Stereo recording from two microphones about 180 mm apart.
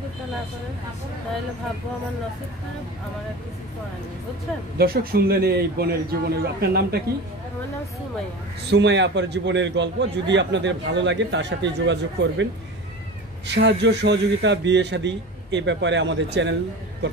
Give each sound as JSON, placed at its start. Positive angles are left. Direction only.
{"t": 4.7, "sound": "a man's voice", "side_deg": -60}
{"t": 8.6, "sound": "a man's voice", "side_deg": -70}
{"t": 13.6, "sound": "a man's voice", "side_deg": -70}